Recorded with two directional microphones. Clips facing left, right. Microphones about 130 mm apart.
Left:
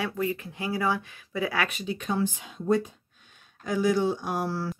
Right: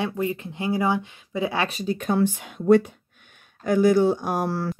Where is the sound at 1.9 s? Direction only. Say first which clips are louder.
Right 6 dB; 55° right (ahead or behind).